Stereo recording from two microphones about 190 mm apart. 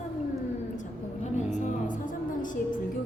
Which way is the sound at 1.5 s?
40° left (ahead or behind).